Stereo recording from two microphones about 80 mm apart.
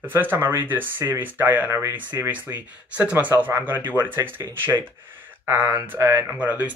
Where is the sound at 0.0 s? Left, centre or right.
Right.